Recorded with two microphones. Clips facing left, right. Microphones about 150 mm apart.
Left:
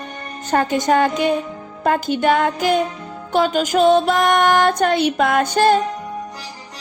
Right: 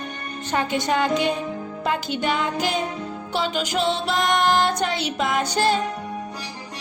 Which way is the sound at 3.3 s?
50° left (ahead or behind).